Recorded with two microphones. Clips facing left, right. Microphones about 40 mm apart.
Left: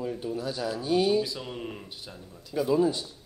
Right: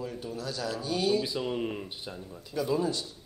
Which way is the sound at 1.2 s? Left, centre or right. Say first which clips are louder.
Right 4 dB; centre.